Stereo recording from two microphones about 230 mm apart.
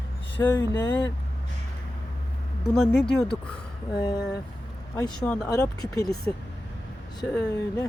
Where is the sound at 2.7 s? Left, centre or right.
Centre.